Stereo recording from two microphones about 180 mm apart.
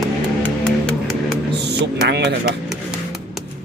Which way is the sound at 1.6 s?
70° right (ahead or behind).